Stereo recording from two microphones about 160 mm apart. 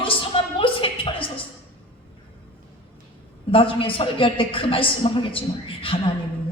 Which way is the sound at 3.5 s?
35° left (ahead or behind).